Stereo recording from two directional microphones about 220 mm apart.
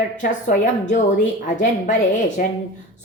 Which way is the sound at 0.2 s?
35° left (ahead or behind).